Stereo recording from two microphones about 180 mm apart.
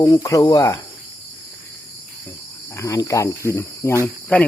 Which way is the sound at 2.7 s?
15° left (ahead or behind).